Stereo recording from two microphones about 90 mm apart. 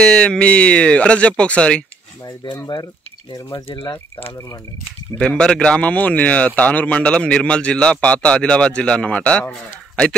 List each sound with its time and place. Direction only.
0.0 s speech: 10° left (ahead or behind)
2.2 s speech: 50° left (ahead or behind)
5.1 s speech: 10° left (ahead or behind)